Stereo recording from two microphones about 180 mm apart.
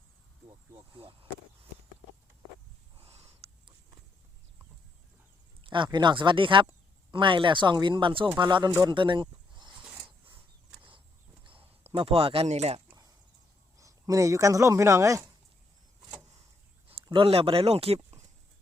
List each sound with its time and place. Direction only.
0.9 s speech: 30° right (ahead or behind)
3.0 s a sound: 35° right (ahead or behind)
5.6 s speech: 25° right (ahead or behind)
11.4 s speech: 30° right (ahead or behind)
13.7 s speech: 20° right (ahead or behind)
16.9 s speech: 30° right (ahead or behind)